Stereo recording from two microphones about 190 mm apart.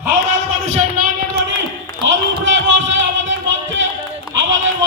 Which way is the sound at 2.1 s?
75° right (ahead or behind).